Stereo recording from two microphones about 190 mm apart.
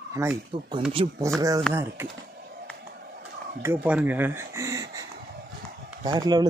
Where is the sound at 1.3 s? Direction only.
15° right (ahead or behind).